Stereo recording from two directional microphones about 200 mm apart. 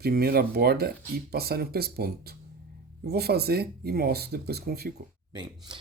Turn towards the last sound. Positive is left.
turn(degrees=-20)  # may be behind; listen again after turning